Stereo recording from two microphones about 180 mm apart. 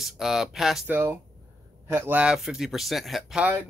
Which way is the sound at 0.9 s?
10° right (ahead or behind).